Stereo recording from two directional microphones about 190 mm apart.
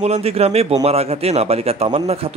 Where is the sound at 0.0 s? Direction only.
35° right (ahead or behind).